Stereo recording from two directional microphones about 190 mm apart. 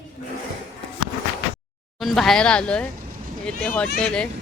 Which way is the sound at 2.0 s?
Centre (ahead or behind).